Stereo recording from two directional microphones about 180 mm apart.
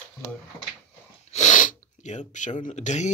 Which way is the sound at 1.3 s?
45° left (ahead or behind).